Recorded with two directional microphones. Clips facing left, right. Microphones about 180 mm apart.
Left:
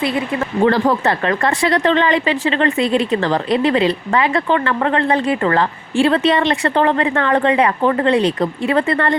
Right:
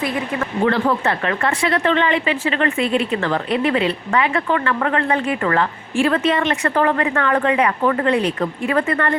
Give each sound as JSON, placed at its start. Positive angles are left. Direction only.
{"t": 0.3, "sound": "speech", "side_deg": 35}